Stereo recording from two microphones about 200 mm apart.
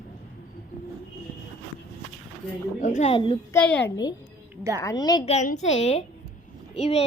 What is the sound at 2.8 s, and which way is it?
Speech, 35° left (ahead or behind).